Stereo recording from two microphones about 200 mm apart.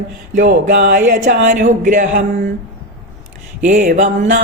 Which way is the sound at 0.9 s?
45° right (ahead or behind).